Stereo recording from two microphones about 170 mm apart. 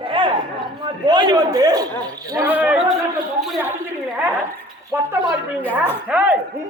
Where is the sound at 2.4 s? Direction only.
10° right (ahead or behind).